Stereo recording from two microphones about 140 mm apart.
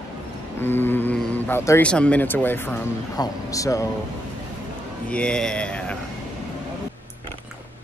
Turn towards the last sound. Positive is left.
turn(degrees=5)  # may be behind; listen again after turning